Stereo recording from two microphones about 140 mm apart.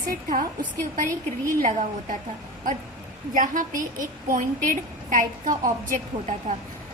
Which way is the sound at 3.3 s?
70° right (ahead or behind).